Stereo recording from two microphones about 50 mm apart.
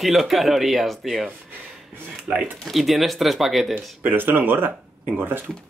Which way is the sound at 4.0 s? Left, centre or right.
Right.